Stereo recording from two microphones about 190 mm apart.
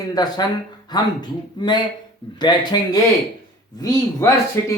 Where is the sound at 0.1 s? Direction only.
20° left (ahead or behind).